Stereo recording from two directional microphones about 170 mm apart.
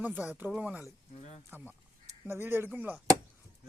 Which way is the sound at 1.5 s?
10° right (ahead or behind).